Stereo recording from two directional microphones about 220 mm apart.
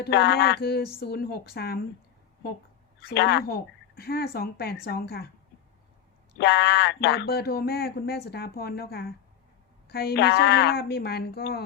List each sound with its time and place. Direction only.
0.0 s speech: 50° left (ahead or behind)
3.0 s speech: 50° left (ahead or behind)
6.3 s speech: 50° left (ahead or behind)